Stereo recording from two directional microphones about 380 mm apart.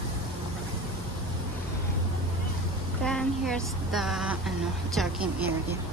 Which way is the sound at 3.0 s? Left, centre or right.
Centre.